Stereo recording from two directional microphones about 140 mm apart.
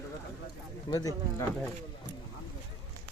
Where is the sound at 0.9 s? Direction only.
25° left (ahead or behind).